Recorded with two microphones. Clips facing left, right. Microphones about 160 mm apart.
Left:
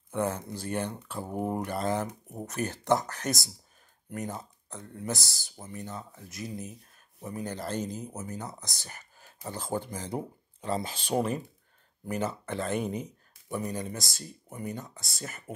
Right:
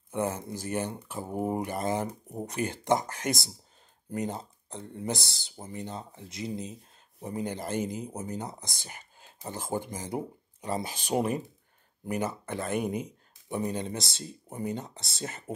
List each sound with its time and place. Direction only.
0.1 s speech: 15° right (ahead or behind)